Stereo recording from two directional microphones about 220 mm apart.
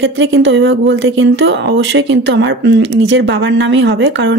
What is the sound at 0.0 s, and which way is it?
Speech, 55° right (ahead or behind).